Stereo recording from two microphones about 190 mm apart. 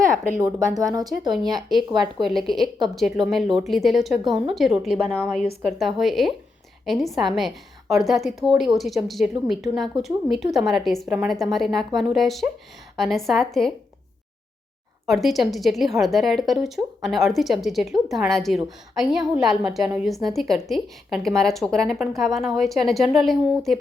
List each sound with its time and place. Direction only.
0.9 s speech: 20° right (ahead or behind)
2.2 s a woman's voice: centre (ahead or behind)
15.0 s a woman's voice: centre (ahead or behind)